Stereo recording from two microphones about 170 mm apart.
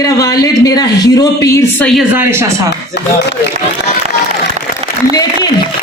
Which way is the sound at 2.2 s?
15° right (ahead or behind).